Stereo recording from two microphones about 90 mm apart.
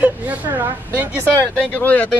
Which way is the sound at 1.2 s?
20° left (ahead or behind).